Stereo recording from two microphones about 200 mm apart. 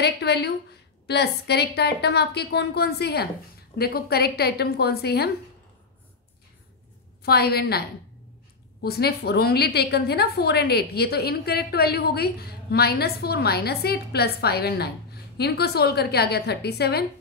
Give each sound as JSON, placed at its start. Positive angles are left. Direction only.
{"t": 0.0, "sound": "a woman's voice", "side_deg": 55}
{"t": 7.2, "sound": "a woman's voice", "side_deg": 50}
{"t": 8.8, "sound": "a woman's voice", "side_deg": 50}